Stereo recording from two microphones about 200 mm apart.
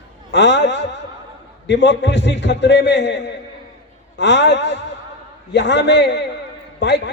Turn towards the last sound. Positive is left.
turn(degrees=60)  # may be behind; listen again after turning